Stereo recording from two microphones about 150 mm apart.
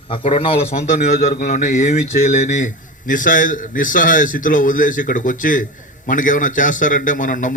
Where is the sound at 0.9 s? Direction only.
55° left (ahead or behind).